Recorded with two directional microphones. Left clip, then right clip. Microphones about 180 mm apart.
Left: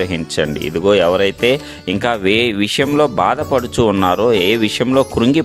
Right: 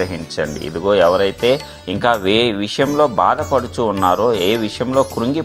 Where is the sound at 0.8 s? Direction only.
40° left (ahead or behind).